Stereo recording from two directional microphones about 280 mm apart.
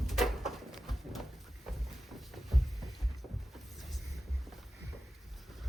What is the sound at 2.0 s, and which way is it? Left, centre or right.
Boat, centre.